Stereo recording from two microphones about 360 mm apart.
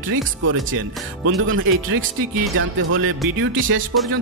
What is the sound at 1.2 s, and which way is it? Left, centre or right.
Music, right.